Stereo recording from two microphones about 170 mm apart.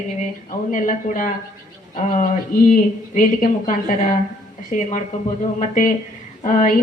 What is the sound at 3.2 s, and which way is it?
Speech, 50° left (ahead or behind).